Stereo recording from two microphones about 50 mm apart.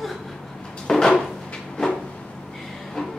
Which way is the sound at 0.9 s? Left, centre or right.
Centre.